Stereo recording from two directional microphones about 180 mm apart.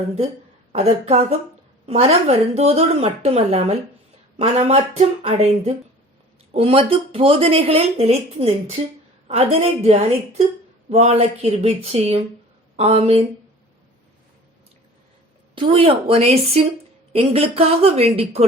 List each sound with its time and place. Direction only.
0.7 s speech: 35° right (ahead or behind)
15.5 s speech: 30° right (ahead or behind)